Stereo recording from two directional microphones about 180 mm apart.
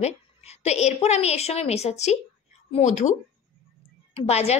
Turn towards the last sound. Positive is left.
turn(degrees=35)  # may be behind; listen again after turning